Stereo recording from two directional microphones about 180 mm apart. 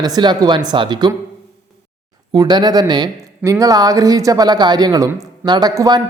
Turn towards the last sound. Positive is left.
turn(degrees=-20)  # may be behind; listen again after turning